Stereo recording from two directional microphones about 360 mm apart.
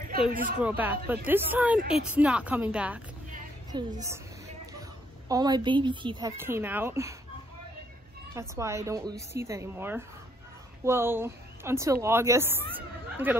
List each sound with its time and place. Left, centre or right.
0.3 s a woman's voice: right
0.6 s speech: centre
3.3 s a sound: right
5.3 s a woman's voice: centre
8.4 s a woman's voice: centre
12.7 s chatter: centre